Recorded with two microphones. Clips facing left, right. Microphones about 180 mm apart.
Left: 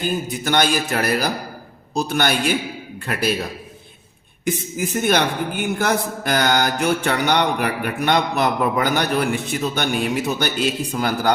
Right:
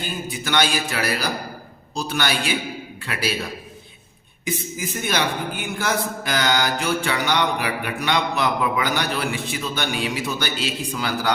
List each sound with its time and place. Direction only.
0.0 s a woman's voice: 45° left (ahead or behind)
4.4 s a woman's voice: 50° left (ahead or behind)